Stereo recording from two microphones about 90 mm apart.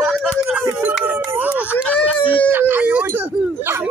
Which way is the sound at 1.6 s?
20° left (ahead or behind).